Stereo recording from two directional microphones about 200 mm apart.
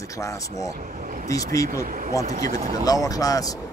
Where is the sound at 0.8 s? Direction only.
40° right (ahead or behind).